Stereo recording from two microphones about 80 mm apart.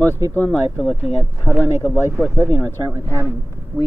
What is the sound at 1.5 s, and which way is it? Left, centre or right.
Speech, centre.